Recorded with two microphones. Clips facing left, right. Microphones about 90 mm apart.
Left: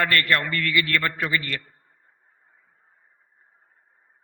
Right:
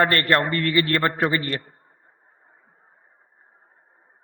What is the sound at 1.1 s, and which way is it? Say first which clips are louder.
Speech: right 4 dB; 35° right (ahead or behind).